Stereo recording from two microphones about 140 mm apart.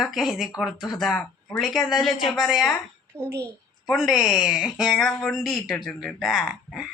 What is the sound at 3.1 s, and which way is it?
Speech, 20° right (ahead or behind).